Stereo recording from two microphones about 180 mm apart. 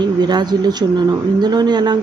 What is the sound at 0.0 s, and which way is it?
Speech, 25° right (ahead or behind).